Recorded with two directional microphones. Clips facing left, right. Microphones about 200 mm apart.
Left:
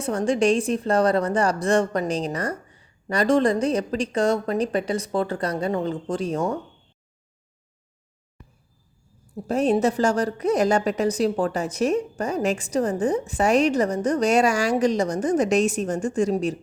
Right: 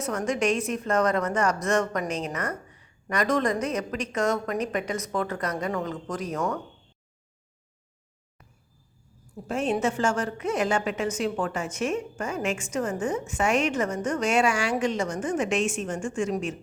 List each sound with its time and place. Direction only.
0.0 s a woman's voice: 30° left (ahead or behind)
9.3 s a woman's voice: 35° left (ahead or behind)